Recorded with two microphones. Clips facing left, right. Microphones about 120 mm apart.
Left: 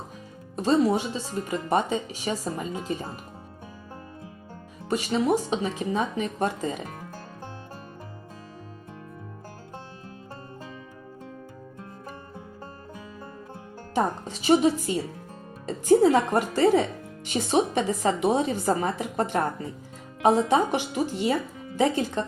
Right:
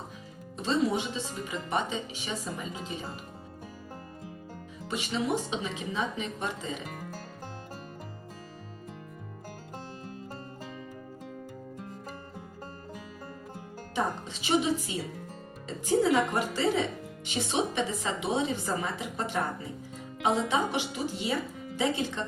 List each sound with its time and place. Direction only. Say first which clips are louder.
0.5 s speech: left 6 dB; 45° left (ahead or behind)
4.9 s speech: left 7 dB; 40° left (ahead or behind)
13.9 s speech: left 5 dB; 45° left (ahead or behind)